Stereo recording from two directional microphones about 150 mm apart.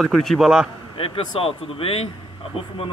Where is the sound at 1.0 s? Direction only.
40° left (ahead or behind).